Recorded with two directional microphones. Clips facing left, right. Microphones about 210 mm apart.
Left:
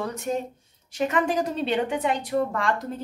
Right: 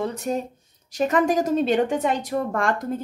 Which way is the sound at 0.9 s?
40° right (ahead or behind).